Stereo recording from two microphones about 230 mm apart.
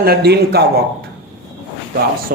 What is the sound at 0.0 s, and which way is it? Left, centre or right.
Speech, right.